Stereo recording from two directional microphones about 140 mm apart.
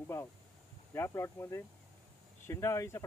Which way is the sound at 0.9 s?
20° left (ahead or behind).